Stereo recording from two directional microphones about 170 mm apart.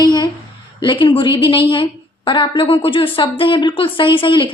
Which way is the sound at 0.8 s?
30° left (ahead or behind).